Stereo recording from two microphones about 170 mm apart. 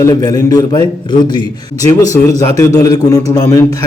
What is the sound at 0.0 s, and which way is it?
A man's voice, 25° left (ahead or behind).